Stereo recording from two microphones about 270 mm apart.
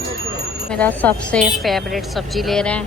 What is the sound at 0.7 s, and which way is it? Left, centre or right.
A woman's voice, centre.